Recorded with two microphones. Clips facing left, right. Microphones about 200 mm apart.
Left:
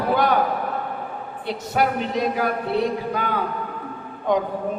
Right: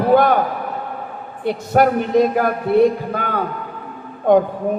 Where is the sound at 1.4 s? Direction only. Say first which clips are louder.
Right 7 dB; 50° right (ahead or behind).